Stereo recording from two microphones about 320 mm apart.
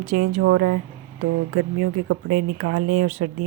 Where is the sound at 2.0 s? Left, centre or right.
Right.